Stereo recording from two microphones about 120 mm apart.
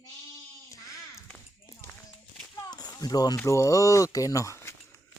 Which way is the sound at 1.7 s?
20° left (ahead or behind).